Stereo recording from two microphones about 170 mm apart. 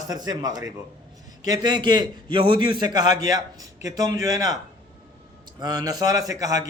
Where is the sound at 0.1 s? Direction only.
25° right (ahead or behind).